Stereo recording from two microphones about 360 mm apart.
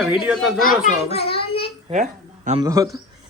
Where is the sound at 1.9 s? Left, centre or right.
Centre.